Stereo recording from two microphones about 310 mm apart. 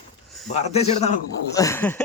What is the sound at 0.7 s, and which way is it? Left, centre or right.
Speech, left.